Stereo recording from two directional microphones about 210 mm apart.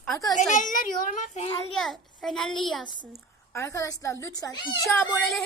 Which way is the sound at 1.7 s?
Centre (ahead or behind).